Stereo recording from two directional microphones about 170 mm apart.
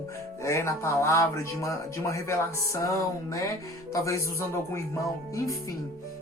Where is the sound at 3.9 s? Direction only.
20° left (ahead or behind).